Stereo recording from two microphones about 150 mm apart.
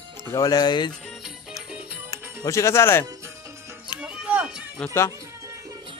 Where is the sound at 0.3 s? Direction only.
25° left (ahead or behind).